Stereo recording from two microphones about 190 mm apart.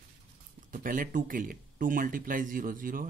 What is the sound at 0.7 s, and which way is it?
Speech, 45° right (ahead or behind).